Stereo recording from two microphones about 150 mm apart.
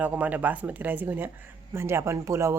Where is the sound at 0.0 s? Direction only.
10° right (ahead or behind).